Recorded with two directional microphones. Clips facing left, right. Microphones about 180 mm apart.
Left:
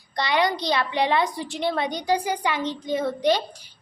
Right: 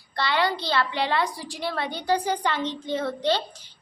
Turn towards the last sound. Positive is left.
turn(degrees=10)  # may be behind; listen again after turning